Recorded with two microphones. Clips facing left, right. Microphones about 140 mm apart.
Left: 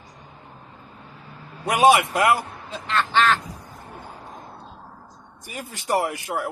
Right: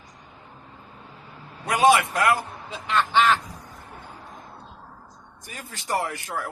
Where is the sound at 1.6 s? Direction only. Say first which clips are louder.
Left 2 dB; 15° left (ahead or behind).